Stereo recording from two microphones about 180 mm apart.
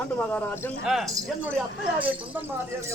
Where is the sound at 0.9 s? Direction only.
Centre (ahead or behind).